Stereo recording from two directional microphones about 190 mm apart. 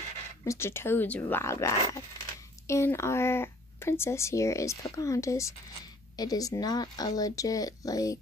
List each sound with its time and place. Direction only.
0.5 s speech: 15° left (ahead or behind)